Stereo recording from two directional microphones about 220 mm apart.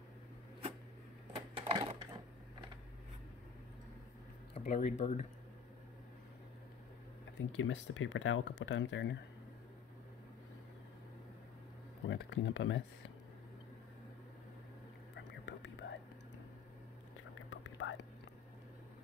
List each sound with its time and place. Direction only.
1.3 s a sound: 25° right (ahead or behind)
4.6 s speech: 30° left (ahead or behind)
7.3 s speech: 60° left (ahead or behind)
12.1 s speech: 60° left (ahead or behind)
15.1 s whispering: 50° left (ahead or behind)
17.2 s whispering: 60° left (ahead or behind)